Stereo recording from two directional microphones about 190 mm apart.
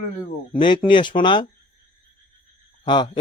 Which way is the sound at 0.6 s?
25° left (ahead or behind).